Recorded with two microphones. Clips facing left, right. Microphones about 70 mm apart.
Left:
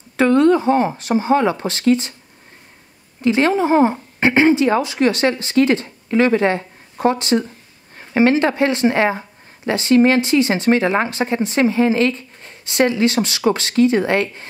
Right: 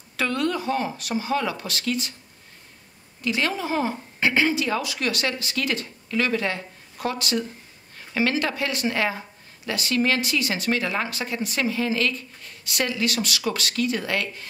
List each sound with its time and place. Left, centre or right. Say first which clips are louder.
0.2 s a woman's voice: left 12 dB; left
3.2 s a woman's voice: left 10 dB; left